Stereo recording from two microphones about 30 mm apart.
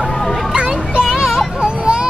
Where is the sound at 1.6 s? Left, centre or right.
Right.